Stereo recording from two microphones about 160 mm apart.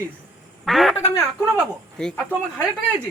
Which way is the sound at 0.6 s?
Centre (ahead or behind).